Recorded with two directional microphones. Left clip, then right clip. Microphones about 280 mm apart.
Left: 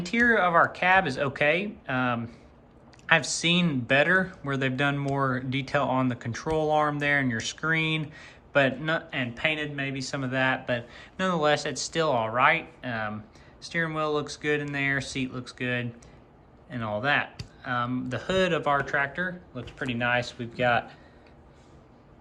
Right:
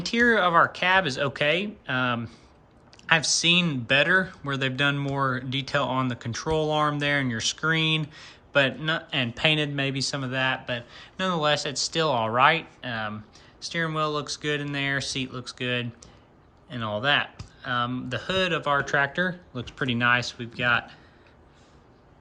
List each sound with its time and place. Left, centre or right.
0.0 s speech: centre